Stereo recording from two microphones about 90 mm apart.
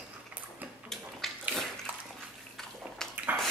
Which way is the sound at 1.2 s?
Centre (ahead or behind).